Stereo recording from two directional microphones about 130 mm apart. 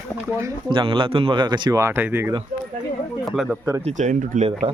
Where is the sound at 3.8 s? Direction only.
70° right (ahead or behind).